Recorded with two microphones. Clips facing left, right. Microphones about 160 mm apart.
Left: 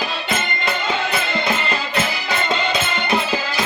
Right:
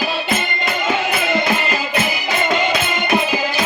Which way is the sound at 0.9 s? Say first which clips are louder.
Right 3 dB; 10° right (ahead or behind).